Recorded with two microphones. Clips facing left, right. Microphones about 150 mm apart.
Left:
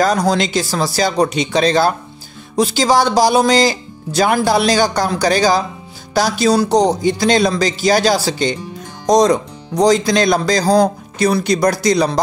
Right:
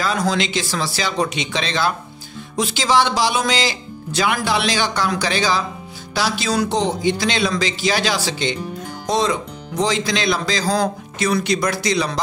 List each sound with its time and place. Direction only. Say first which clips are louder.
0.0 s speech: left 6 dB; 40° left (ahead or behind)